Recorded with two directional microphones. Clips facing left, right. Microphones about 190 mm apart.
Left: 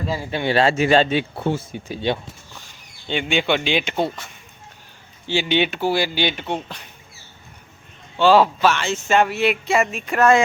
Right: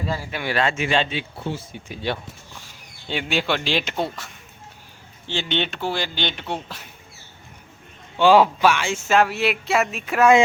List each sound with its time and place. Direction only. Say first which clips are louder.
0.3 s speech: left 7 dB; 30° left (ahead or behind)
1.4 s speech: left 6 dB; 55° left (ahead or behind)
1.9 s speech: left 4 dB; 25° left (ahead or behind)
2.6 s speech: even; 5° right (ahead or behind)
5.3 s speech: left 5 dB; 10° left (ahead or behind)
8.2 s speech: even; 15° right (ahead or behind)